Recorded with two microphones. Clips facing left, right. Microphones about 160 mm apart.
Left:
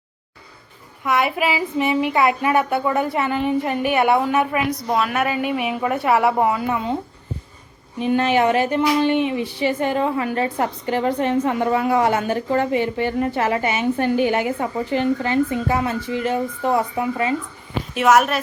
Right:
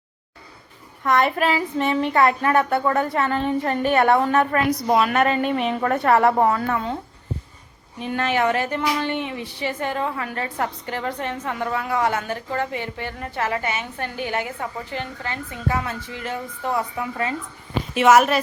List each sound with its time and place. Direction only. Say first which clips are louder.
1.0 s a woman's voice: right 1 dB; 5° left (ahead or behind)
7.9 s a woman's voice: left 5 dB; 20° left (ahead or behind)
17.9 s a woman's voice: right 1 dB; centre (ahead or behind)